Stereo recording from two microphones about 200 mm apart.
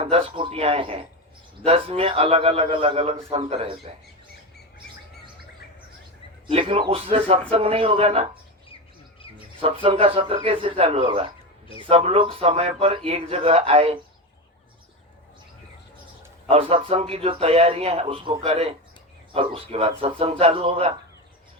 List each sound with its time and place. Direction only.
0.0 s a man's voice: 30° right (ahead or behind)
6.5 s a man's voice: 25° right (ahead or behind)
9.6 s a man's voice: 25° right (ahead or behind)
16.5 s a man's voice: 30° right (ahead or behind)